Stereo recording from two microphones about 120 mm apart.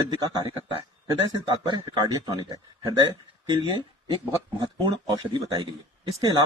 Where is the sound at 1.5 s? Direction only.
40° right (ahead or behind).